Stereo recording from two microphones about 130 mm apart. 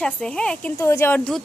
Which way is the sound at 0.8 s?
20° left (ahead or behind).